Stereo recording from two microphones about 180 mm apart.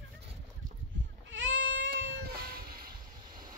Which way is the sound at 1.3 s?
90° right.